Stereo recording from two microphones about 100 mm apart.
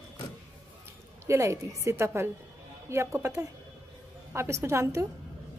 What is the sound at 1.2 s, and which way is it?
A woman's voice, 30° right (ahead or behind).